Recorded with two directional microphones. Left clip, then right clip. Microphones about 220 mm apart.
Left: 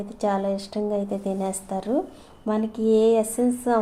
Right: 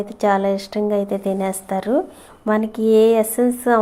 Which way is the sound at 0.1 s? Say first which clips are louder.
Right 7 dB; 20° right (ahead or behind).